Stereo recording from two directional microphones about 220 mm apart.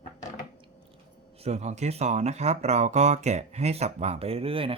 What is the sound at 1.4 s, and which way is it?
Speech, 30° right (ahead or behind).